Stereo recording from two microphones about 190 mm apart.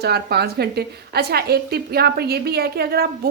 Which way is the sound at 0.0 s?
60° right (ahead or behind).